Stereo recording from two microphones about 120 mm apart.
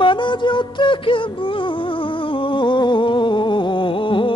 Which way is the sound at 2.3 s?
45° left (ahead or behind).